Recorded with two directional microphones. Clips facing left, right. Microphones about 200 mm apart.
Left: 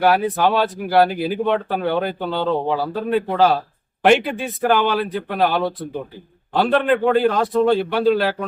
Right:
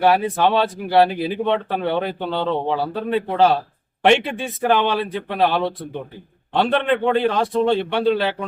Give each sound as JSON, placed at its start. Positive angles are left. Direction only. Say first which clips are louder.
{"t": 0.0, "sound": "speech", "louder": "even", "side_deg": 0}